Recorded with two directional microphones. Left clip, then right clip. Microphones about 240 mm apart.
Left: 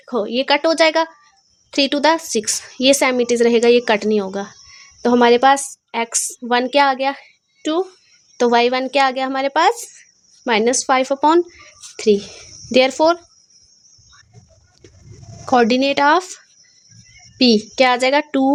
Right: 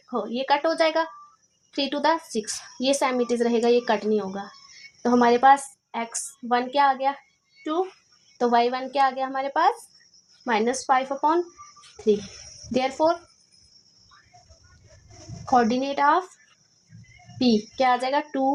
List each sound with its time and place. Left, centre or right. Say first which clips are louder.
0.1 s speech: left 7 dB; left
8.4 s speech: left 7 dB; left
10.8 s speech: left 6 dB; left
12.7 s speech: left 9 dB; left
15.4 s speech: left 7 dB; left
17.4 s speech: left 8 dB; left